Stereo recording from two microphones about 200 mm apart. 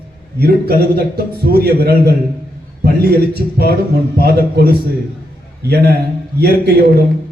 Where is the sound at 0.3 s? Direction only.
50° right (ahead or behind).